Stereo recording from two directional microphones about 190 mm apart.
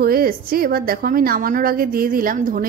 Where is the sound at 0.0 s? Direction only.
50° right (ahead or behind).